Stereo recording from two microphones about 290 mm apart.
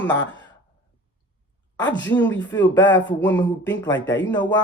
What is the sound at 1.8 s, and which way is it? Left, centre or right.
Speech, left.